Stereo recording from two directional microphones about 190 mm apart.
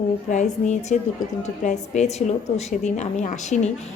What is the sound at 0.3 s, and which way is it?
A woman's voice, 40° left (ahead or behind).